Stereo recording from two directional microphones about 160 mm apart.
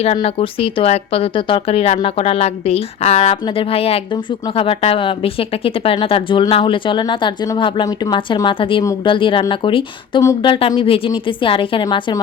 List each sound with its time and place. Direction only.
0.0 s a woman's voice: 40° left (ahead or behind)